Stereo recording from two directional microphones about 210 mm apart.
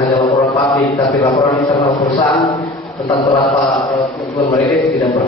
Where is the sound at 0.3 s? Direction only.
15° left (ahead or behind).